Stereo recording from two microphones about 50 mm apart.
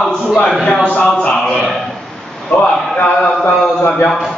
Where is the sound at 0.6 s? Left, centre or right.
Centre.